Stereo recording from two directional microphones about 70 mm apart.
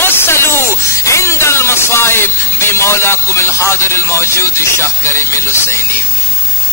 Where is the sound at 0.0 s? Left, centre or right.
Left.